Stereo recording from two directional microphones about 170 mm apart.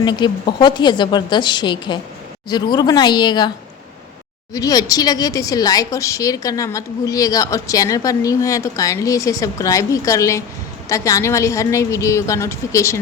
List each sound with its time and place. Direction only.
0.0 s speech: 25° left (ahead or behind)
4.5 s a woman's voice: 20° left (ahead or behind)